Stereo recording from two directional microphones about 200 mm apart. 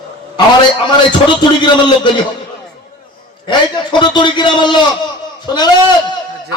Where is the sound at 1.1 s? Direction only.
25° left (ahead or behind).